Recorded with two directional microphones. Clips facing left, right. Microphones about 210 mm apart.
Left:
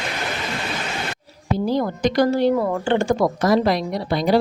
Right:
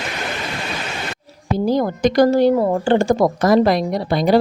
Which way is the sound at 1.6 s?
45° right (ahead or behind).